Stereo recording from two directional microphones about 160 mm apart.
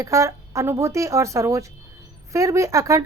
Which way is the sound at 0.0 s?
20° right (ahead or behind).